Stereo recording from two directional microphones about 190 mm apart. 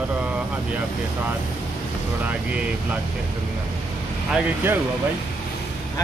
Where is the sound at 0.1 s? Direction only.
5° right (ahead or behind).